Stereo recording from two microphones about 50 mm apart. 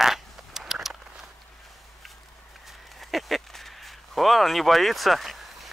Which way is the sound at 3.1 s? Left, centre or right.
Centre.